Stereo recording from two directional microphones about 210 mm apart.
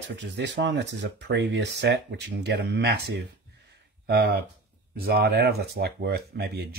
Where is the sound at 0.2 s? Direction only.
60° right (ahead or behind).